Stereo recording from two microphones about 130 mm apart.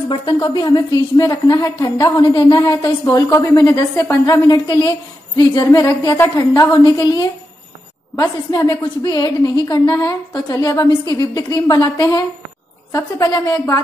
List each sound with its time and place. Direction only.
0.1 s a woman's voice: 40° left (ahead or behind)
8.5 s a woman's voice: 30° left (ahead or behind)